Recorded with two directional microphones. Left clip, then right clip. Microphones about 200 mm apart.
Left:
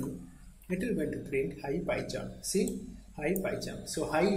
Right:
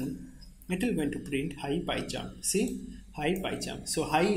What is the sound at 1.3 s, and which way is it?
Speech, 35° right (ahead or behind).